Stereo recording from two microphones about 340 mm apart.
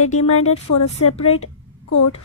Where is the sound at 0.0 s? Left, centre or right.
Left.